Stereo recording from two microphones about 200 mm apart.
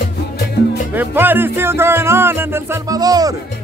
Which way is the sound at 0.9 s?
10° right (ahead or behind).